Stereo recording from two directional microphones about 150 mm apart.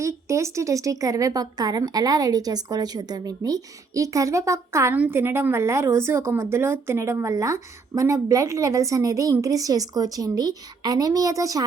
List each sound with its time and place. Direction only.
0.0 s a woman's voice: 20° right (ahead or behind)